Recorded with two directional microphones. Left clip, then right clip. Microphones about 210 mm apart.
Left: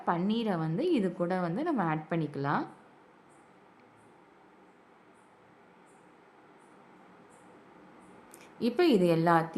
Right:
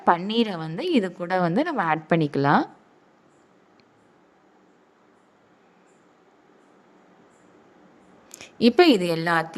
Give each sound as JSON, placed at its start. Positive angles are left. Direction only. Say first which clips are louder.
{"t": 0.3, "sound": "a woman's voice", "louder": "right 7 dB", "side_deg": -40}
{"t": 8.3, "sound": "a woman's voice", "louder": "right 12 dB", "side_deg": -35}